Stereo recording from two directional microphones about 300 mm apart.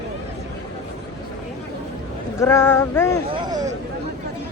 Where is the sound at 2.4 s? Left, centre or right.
Centre.